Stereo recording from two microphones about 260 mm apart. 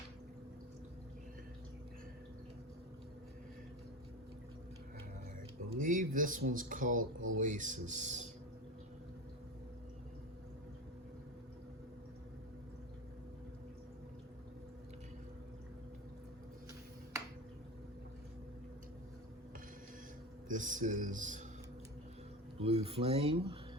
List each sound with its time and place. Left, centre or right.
5.8 s speech: right
7.0 s speech: right
7.3 s speech: right
20.5 s a sound: right
22.6 s speech: right